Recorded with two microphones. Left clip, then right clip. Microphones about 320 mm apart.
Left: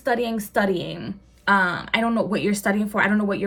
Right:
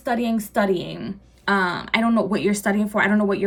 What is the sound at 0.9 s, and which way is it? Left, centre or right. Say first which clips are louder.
Speech: right 1 dB; centre.